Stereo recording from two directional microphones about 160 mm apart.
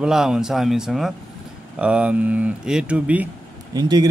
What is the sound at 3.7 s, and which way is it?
Speech, 25° right (ahead or behind).